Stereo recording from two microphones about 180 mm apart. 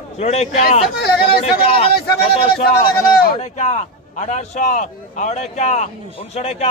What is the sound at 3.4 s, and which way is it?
A man's voice, 40° left (ahead or behind).